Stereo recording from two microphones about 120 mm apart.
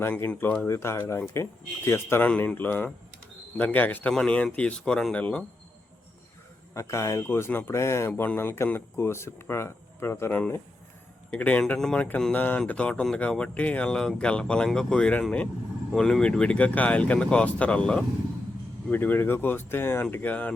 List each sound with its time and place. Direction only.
0.0 s speech: 15° left (ahead or behind)
6.7 s speech: 25° left (ahead or behind)